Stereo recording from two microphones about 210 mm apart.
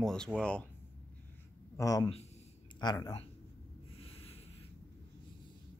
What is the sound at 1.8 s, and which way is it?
Speech, 15° left (ahead or behind).